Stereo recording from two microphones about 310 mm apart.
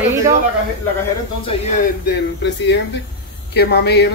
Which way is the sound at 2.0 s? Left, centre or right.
Left.